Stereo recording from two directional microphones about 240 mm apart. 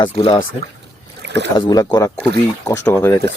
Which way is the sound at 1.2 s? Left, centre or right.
Right.